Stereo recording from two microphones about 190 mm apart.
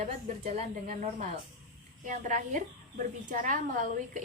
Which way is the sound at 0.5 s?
40° right (ahead or behind).